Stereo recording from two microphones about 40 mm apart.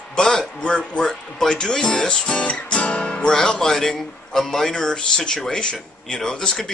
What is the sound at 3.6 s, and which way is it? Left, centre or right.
A man's voice, centre.